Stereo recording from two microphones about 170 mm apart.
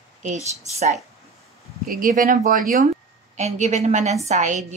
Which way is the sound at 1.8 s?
55° right (ahead or behind).